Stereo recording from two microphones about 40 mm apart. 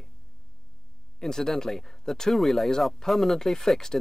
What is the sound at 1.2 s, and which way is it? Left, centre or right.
Speech, centre.